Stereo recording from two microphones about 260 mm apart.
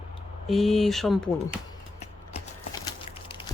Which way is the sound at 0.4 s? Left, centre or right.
Centre.